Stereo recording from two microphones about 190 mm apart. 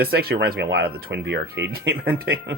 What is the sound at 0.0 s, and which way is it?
Speech, 55° right (ahead or behind).